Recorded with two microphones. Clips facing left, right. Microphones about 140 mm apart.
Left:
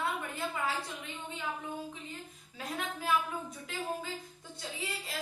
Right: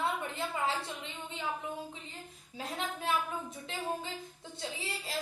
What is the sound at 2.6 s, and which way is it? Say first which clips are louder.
Speech: right 1 dB; 25° right (ahead or behind).